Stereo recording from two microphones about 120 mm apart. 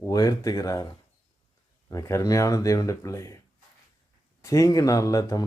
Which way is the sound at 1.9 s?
25° left (ahead or behind).